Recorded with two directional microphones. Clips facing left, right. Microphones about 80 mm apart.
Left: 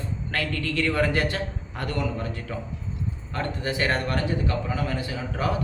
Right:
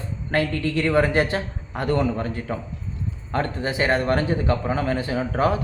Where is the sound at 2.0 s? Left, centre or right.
Right.